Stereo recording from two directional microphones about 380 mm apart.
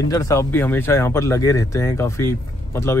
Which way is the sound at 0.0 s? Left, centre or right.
Centre.